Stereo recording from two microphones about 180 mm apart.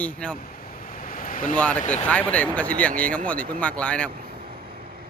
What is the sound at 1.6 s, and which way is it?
A man's voice, 10° left (ahead or behind).